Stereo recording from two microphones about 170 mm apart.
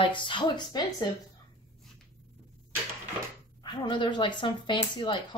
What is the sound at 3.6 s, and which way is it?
Speech, 30° left (ahead or behind).